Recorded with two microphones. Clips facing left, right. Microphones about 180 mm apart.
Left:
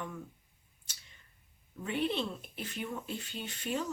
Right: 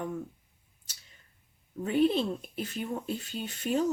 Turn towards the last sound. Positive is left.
turn(degrees=-40)  # may be behind; listen again after turning